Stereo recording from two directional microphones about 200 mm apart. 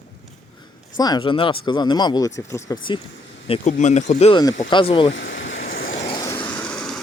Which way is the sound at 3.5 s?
35° left (ahead or behind).